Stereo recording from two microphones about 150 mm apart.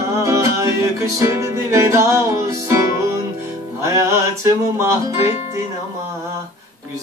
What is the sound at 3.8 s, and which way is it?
Music, 20° right (ahead or behind).